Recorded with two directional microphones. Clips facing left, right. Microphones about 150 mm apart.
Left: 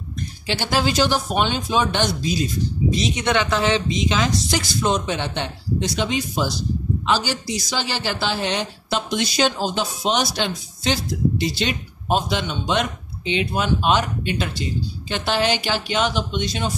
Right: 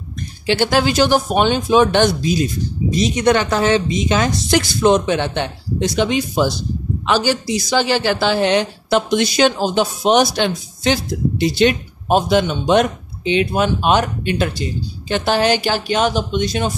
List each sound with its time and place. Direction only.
0.5 s a woman's voice: 60° right (ahead or behind)
2.9 s a woman's voice: 45° right (ahead or behind)